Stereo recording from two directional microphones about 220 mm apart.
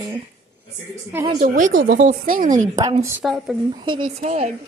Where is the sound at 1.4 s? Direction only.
40° right (ahead or behind).